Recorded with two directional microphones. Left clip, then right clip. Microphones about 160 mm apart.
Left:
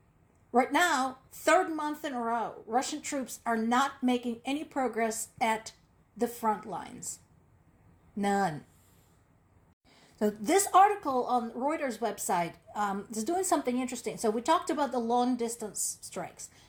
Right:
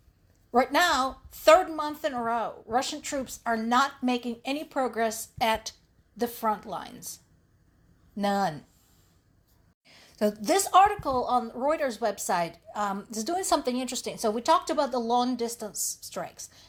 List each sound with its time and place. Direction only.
0.5 s a woman's voice: 25° right (ahead or behind)
8.1 s a woman's voice: 25° right (ahead or behind)
9.8 s a woman's voice: 30° right (ahead or behind)
13.7 s a woman's voice: 50° right (ahead or behind)
14.2 s a woman's voice: 25° right (ahead or behind)